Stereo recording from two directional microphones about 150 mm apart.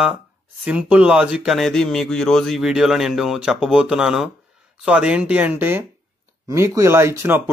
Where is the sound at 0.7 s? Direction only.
10° right (ahead or behind).